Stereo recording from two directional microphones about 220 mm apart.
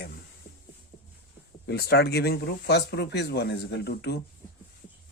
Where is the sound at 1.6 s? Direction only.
50° left (ahead or behind).